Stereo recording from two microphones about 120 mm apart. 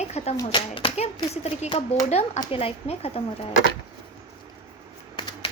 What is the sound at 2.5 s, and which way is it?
Speech, 55° left (ahead or behind).